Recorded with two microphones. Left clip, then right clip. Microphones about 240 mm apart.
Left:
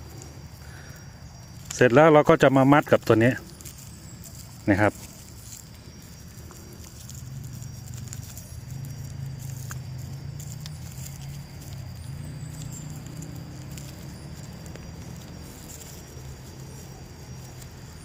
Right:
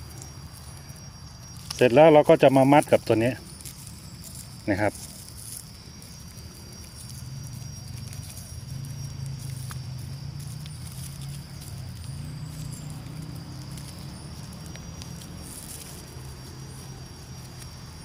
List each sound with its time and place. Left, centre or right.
1.7 s speech: left
4.6 s speech: left